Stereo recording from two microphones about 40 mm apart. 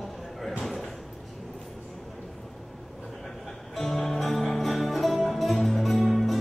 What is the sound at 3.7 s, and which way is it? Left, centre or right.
Music, centre.